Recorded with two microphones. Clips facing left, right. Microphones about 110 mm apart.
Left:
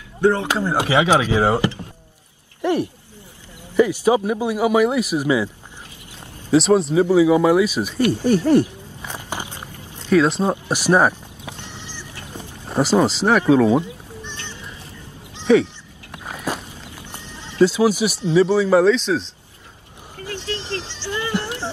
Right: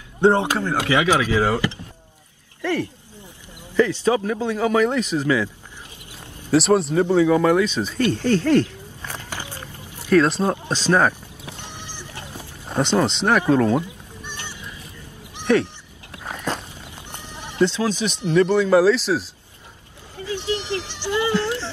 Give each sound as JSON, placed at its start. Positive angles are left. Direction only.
{"t": 0.2, "sound": "speech", "side_deg": -25}
{"t": 0.6, "sound": "a man's voice", "side_deg": 20}
{"t": 6.5, "sound": "speech", "side_deg": 0}
{"t": 10.1, "sound": "speech", "side_deg": 0}
{"t": 10.4, "sound": "a man's voice", "side_deg": 15}
{"t": 11.6, "sound": "a sound", "side_deg": -15}
{"t": 12.6, "sound": "speech", "side_deg": 5}
{"t": 14.2, "sound": "a sound", "side_deg": -15}
{"t": 15.5, "sound": "speech", "side_deg": 5}
{"t": 16.3, "sound": "walk", "side_deg": 5}
{"t": 16.9, "sound": "sheep", "side_deg": -15}
{"t": 17.6, "sound": "a man's voice", "side_deg": 10}
{"t": 20.2, "sound": "a sound", "side_deg": -15}
{"t": 21.4, "sound": "a sound", "side_deg": 15}